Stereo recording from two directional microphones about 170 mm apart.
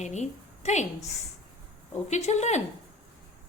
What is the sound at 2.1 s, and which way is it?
Speech, 40° left (ahead or behind).